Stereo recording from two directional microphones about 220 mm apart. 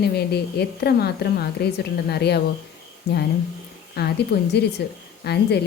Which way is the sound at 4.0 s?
45° left (ahead or behind).